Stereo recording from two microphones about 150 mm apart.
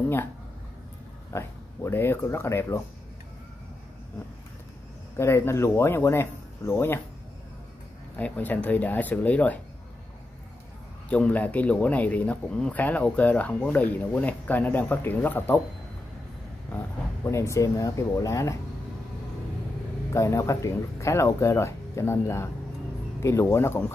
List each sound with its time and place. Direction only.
1.3 s speech: 15° left (ahead or behind)
5.1 s speech: 15° left (ahead or behind)
8.2 s speech: 10° left (ahead or behind)
11.1 s speech: 10° left (ahead or behind)
16.7 s speech: 20° left (ahead or behind)
20.1 s speech: 20° left (ahead or behind)